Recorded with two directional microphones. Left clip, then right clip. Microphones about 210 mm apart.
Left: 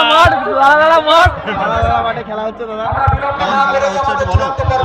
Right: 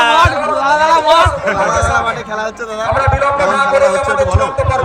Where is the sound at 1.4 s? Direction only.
15° right (ahead or behind).